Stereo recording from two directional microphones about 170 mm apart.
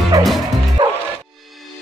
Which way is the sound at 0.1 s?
20° right (ahead or behind).